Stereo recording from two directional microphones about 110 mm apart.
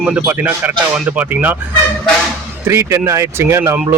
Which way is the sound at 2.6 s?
25° right (ahead or behind).